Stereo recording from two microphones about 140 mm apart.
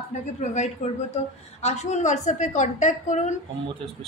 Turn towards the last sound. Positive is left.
turn(degrees=60)  # may be behind; listen again after turning